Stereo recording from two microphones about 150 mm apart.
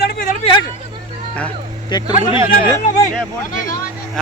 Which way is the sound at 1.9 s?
30° left (ahead or behind).